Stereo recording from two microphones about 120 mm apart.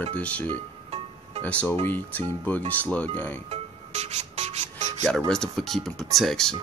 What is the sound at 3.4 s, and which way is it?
Music, 65° right (ahead or behind).